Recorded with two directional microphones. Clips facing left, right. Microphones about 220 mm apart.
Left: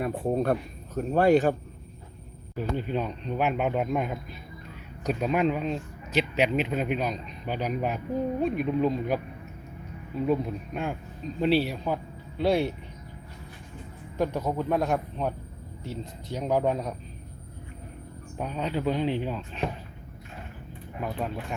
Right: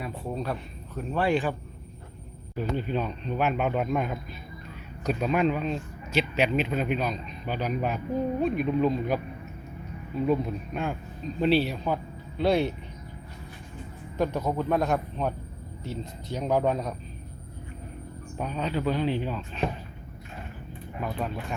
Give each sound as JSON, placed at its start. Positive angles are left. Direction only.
{"t": 0.0, "sound": "a man's voice", "side_deg": 55}
{"t": 2.7, "sound": "speech", "side_deg": 15}
{"t": 11.3, "sound": "speech", "side_deg": 10}
{"t": 14.2, "sound": "speech", "side_deg": 10}
{"t": 18.3, "sound": "speech", "side_deg": 10}
{"t": 21.0, "sound": "speech", "side_deg": 15}